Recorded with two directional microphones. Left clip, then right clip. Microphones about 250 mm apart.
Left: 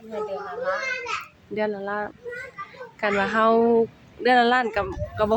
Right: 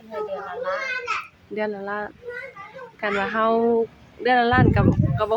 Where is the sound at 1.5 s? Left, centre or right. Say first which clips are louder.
Left 1 dB; centre.